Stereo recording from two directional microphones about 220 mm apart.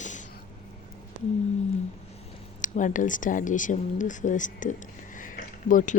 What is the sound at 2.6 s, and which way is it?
Speech, 35° left (ahead or behind).